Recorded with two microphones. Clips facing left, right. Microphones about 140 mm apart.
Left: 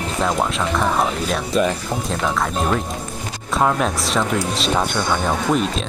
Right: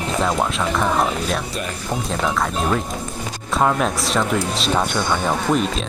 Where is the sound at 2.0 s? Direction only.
Centre (ahead or behind).